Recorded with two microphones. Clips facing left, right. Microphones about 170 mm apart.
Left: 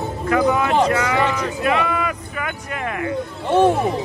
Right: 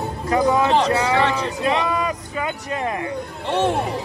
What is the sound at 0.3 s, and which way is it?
Speech, 35° right (ahead or behind).